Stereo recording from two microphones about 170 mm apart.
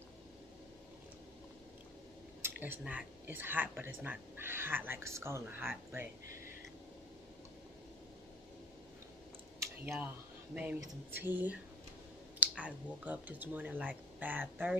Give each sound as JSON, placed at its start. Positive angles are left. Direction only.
{"t": 2.4, "sound": "speech", "side_deg": -10}
{"t": 10.5, "sound": "speech", "side_deg": -10}